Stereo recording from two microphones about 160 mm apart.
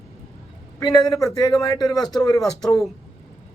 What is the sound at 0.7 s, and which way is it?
A man's voice, 25° left (ahead or behind).